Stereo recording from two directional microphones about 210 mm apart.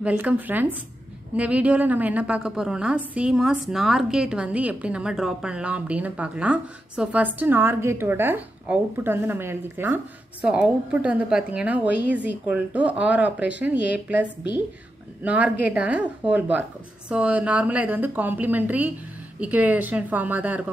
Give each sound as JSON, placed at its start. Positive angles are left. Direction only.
{"t": 0.0, "sound": "a woman's voice", "side_deg": -10}
{"t": 15.2, "sound": "a woman's voice", "side_deg": -5}